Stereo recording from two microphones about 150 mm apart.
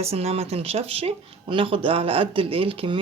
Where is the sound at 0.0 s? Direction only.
45° right (ahead or behind).